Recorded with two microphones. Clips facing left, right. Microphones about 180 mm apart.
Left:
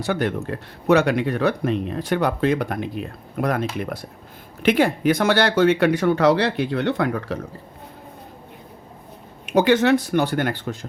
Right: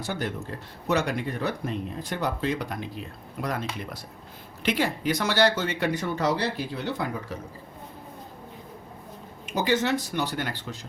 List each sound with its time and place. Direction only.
0.0 s speech: 65° left (ahead or behind)
9.5 s speech: 70° left (ahead or behind)